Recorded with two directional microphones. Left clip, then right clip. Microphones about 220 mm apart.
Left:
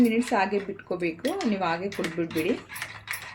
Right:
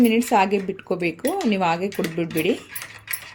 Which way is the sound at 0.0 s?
45° right (ahead or behind).